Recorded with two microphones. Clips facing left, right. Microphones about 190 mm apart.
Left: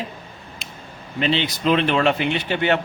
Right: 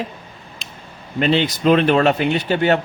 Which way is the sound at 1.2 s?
45° right (ahead or behind).